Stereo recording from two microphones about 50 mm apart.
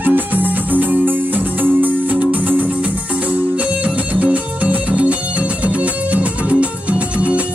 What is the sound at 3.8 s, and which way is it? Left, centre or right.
Music, right.